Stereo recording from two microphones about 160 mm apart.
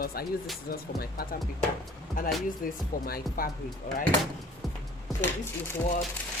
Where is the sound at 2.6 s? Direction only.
65° left (ahead or behind).